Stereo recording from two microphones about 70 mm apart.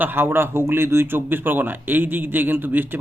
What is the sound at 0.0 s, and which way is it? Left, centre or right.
A man's voice, right.